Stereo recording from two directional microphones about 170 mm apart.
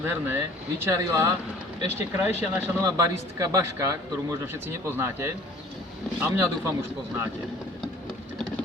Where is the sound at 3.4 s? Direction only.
20° right (ahead or behind).